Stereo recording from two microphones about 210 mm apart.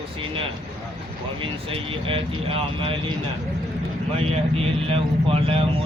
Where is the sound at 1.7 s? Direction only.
25° right (ahead or behind).